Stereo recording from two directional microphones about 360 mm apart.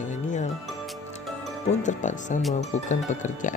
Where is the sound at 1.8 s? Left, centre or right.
Centre.